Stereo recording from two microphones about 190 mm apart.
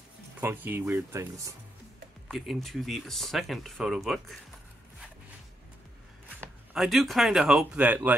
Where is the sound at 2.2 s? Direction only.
Centre (ahead or behind).